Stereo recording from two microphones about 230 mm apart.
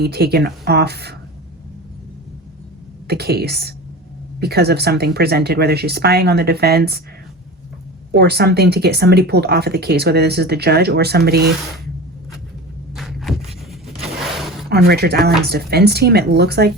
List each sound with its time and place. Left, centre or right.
0.0 s speech: right
3.1 s speech: right
8.1 s speech: right
13.0 s vehicle: centre
14.7 s speech: right